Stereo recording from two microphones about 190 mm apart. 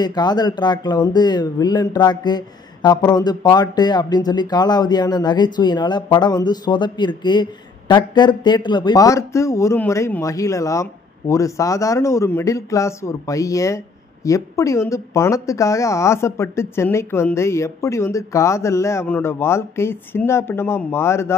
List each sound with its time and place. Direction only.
0.0 s speech: 20° left (ahead or behind)